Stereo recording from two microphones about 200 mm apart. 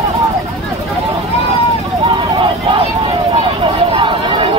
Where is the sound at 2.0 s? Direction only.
25° right (ahead or behind).